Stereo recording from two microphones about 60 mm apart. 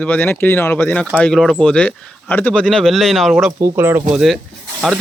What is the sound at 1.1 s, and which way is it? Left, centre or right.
Speech, centre.